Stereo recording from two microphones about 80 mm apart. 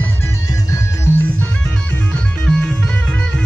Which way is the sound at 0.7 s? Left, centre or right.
Left.